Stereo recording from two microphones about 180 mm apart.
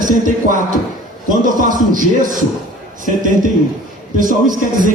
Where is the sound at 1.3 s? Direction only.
50° right (ahead or behind).